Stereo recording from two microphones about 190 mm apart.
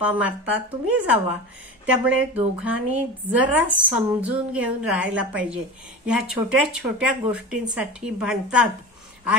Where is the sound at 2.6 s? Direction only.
10° right (ahead or behind).